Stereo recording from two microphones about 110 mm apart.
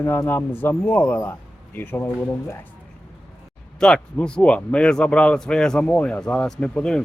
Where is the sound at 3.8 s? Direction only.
5° left (ahead or behind).